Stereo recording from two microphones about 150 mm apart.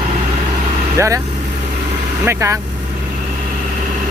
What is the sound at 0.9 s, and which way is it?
Speech, 20° right (ahead or behind).